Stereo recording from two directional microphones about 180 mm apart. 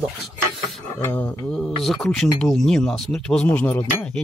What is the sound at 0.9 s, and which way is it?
Speech, 15° left (ahead or behind).